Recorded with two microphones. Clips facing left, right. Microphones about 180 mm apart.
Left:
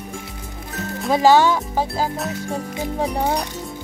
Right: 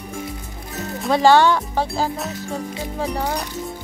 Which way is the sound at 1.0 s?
5° left (ahead or behind).